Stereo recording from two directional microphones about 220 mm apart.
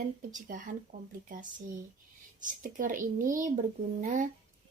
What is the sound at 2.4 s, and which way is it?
Speech, 35° right (ahead or behind).